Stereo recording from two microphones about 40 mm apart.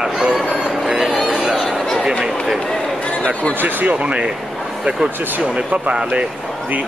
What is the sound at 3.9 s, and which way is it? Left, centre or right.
Speech, right.